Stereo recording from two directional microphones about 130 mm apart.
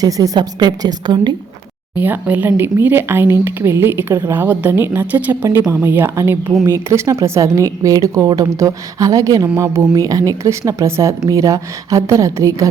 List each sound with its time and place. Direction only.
0.0 s a woman's voice: 30° right (ahead or behind)
2.0 s speech: 15° right (ahead or behind)